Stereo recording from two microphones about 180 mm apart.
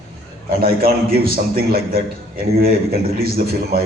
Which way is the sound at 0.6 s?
55° right (ahead or behind).